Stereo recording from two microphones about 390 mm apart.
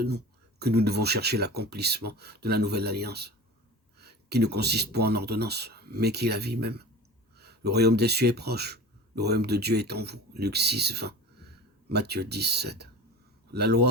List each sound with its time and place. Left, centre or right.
0.6 s speech: right